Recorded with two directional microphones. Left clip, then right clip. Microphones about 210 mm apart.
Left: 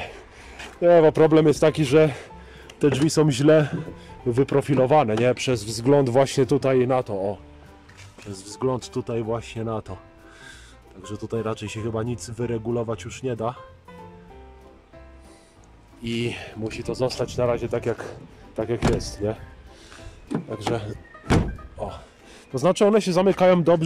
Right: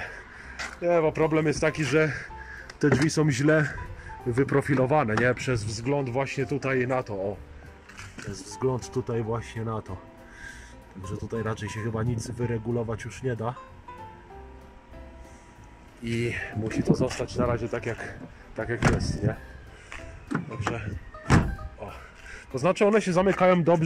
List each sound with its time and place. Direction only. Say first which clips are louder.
0.7 s speech: left 8 dB; 25° left (ahead or behind)
3.0 s speech: left 5 dB; 5° left (ahead or behind); by 7.1 s 20° left (ahead or behind)
8.3 s speech: left 4 dB; 20° left (ahead or behind)
8.5 s speech: left 3 dB; 10° left (ahead or behind)
11.1 s speech: left 4 dB; 5° left (ahead or behind)
16.0 s speech: left 1 dB; 5° left (ahead or behind)
20.5 s speech: left 7 dB; 20° left (ahead or behind)
21.8 s music: left 9 dB; 20° left (ahead or behind)
22.5 s speech: left 4 dB; 15° left (ahead or behind)